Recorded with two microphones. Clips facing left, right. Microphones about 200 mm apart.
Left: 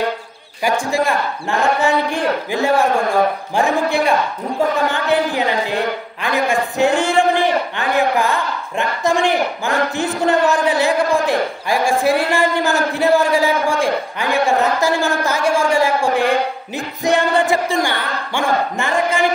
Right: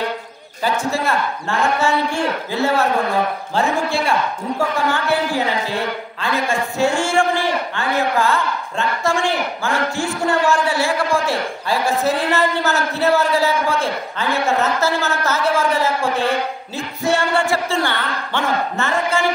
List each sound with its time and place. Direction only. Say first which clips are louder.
0.7 s a man's voice: left 2 dB; 15° left (ahead or behind)